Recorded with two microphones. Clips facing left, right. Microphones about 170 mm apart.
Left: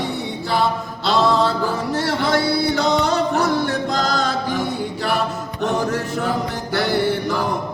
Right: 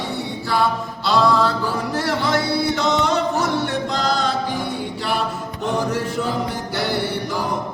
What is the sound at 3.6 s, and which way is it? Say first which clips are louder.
Music: left 1 dB; 40° left (ahead or behind).